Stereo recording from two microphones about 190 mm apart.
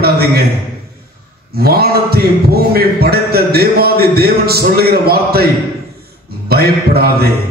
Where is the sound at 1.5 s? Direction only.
55° right (ahead or behind).